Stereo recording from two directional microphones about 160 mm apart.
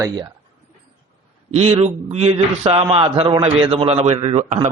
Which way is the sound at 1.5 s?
40° right (ahead or behind).